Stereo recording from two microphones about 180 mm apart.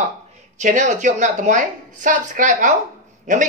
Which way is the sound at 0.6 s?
45° right (ahead or behind).